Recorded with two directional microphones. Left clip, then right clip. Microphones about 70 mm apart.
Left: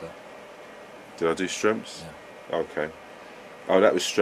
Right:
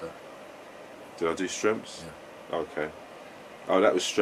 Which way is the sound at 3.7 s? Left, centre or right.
Left.